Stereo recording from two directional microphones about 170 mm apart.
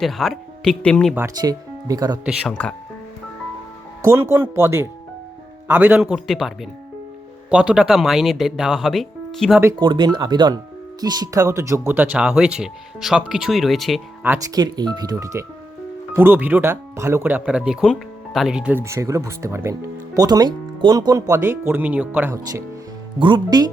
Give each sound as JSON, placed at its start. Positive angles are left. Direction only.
{"t": 0.0, "sound": "speech", "side_deg": 0}
{"t": 1.1, "sound": "speech", "side_deg": -20}
{"t": 2.2, "sound": "speech", "side_deg": -5}
{"t": 4.1, "sound": "speech", "side_deg": -15}
{"t": 9.7, "sound": "speech", "side_deg": -30}
{"t": 14.5, "sound": "speech", "side_deg": -25}
{"t": 23.2, "sound": "speech", "side_deg": -25}